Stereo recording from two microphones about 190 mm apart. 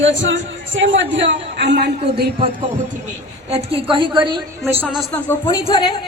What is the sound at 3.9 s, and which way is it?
Speech, 25° right (ahead or behind).